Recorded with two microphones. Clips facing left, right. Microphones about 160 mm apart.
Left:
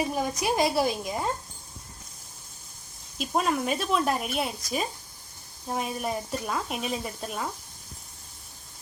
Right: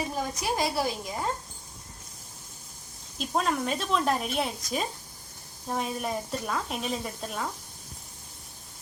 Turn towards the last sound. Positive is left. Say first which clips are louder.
# left 1 dB
turn(degrees=5)  # may be behind; listen again after turning